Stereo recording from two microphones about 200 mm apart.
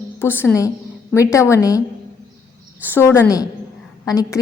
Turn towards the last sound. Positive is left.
turn(degrees=15)  # may be behind; listen again after turning